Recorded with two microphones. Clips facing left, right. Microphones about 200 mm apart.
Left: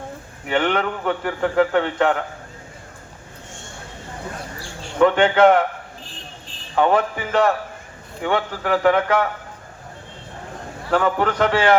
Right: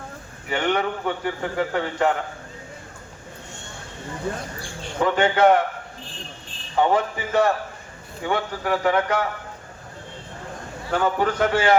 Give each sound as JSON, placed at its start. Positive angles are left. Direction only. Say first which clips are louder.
{"t": 0.5, "sound": "a man's voice", "louder": "left 2 dB", "side_deg": 60}
{"t": 4.9, "sound": "a man's voice", "louder": "left 5 dB", "side_deg": 60}
{"t": 6.7, "sound": "a man's voice", "louder": "left 2 dB", "side_deg": 65}
{"t": 10.9, "sound": "a man's voice", "louder": "left 3 dB", "side_deg": 65}